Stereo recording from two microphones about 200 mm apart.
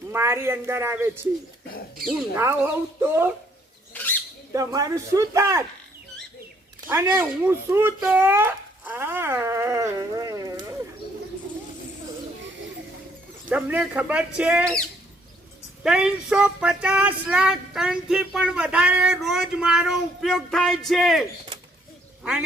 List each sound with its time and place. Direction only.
0.1 s speech: 10° right (ahead or behind)
2.3 s speech: 10° right (ahead or behind)
3.9 s a sound: 10° left (ahead or behind)
4.5 s speech: 15° right (ahead or behind)
6.8 s a child's voice: 15° right (ahead or behind)
13.5 s speech: 10° right (ahead or behind)